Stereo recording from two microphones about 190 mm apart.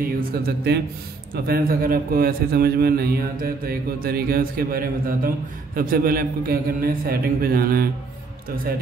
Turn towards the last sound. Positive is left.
turn(degrees=-50)  # may be behind; listen again after turning